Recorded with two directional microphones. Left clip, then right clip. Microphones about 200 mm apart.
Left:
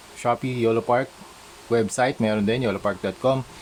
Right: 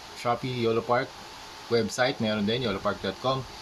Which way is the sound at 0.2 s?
45° left (ahead or behind).